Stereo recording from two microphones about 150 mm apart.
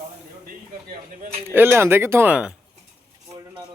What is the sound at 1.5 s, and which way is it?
Speech, 15° right (ahead or behind).